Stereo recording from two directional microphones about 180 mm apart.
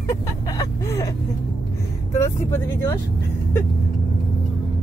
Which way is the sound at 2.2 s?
15° left (ahead or behind).